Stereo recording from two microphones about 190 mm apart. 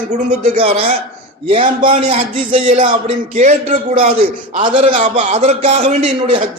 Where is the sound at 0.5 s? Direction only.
30° right (ahead or behind).